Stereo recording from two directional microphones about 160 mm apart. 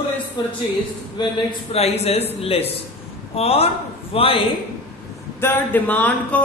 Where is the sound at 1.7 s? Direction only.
40° left (ahead or behind).